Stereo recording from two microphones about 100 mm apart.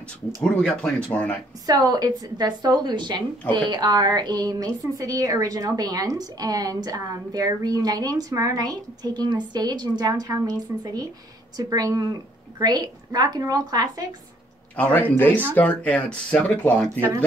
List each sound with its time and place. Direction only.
0.4 s speech: 10° left (ahead or behind)
1.7 s a woman's voice: 40° right (ahead or behind)
14.8 s speech: 15° left (ahead or behind)